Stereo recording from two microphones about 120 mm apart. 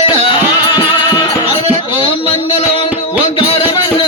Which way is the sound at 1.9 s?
45° left (ahead or behind).